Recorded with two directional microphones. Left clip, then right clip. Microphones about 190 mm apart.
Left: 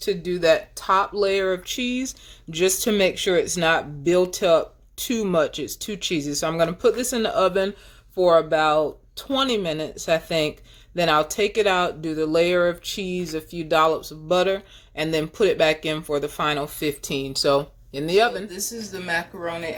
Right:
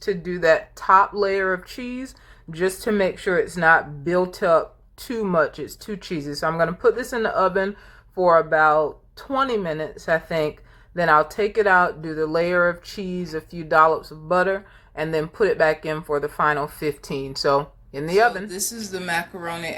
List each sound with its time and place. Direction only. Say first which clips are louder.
0.1 s speech: right 1 dB; 50° left (ahead or behind)
13.0 s speech: left 1 dB; 15° left (ahead or behind)
13.7 s speech: right 3 dB; 50° left (ahead or behind)
18.4 s speech: right 2 dB; 5° right (ahead or behind)